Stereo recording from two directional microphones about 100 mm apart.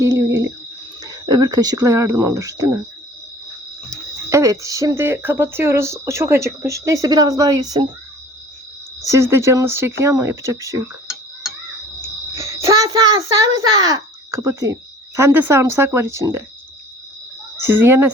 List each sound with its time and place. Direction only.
1.0 s speech: 45° right (ahead or behind)
3.8 s speech: 30° right (ahead or behind)
9.0 s speech: 25° right (ahead or behind)
12.0 s speech: 30° right (ahead or behind)
17.6 s speech: 20° right (ahead or behind)